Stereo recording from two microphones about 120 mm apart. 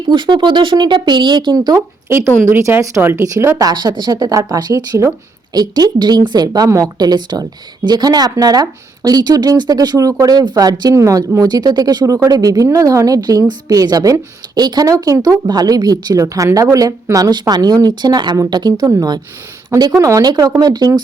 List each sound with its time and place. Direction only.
0.1 s speech: 40° right (ahead or behind); by 3.7 s 25° right (ahead or behind)
3.7 s speech: 35° right (ahead or behind)